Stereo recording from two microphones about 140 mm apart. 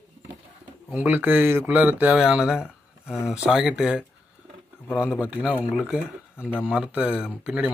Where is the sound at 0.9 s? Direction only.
15° right (ahead or behind).